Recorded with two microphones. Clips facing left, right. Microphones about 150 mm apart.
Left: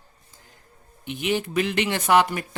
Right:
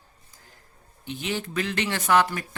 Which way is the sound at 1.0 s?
15° left (ahead or behind).